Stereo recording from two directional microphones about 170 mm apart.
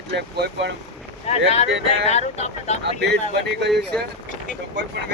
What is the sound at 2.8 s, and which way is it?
Speech, 85° right.